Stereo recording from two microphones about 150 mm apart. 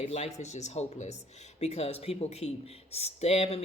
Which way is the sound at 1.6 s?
45° left (ahead or behind).